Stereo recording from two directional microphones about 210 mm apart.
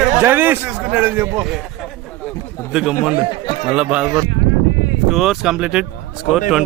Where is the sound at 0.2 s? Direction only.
10° right (ahead or behind).